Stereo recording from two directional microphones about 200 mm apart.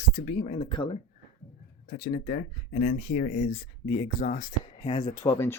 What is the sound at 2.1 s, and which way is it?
Speech, 40° left (ahead or behind).